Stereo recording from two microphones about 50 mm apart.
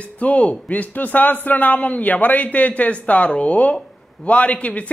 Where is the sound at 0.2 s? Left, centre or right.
Left.